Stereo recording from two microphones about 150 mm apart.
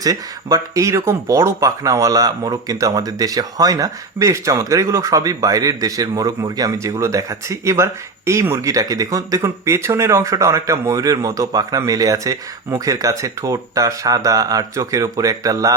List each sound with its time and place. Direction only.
0.0 s speech: 25° right (ahead or behind)